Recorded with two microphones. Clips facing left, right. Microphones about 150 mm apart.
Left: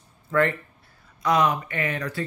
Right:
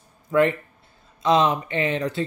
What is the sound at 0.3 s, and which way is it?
Speech, 20° right (ahead or behind).